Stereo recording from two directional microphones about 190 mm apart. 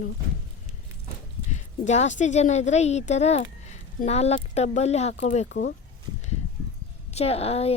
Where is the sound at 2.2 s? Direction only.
40° left (ahead or behind).